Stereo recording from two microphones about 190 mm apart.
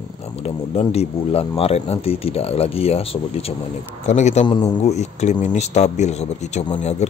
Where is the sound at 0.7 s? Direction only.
30° left (ahead or behind).